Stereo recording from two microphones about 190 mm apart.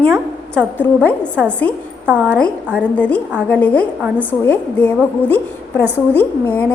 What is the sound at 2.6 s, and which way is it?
Speech, 10° right (ahead or behind).